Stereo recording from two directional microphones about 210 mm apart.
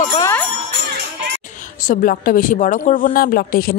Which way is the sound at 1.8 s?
40° left (ahead or behind).